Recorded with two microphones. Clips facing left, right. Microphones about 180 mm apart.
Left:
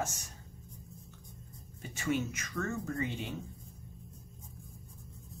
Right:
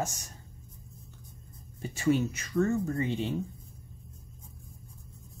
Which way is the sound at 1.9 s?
30° right (ahead or behind).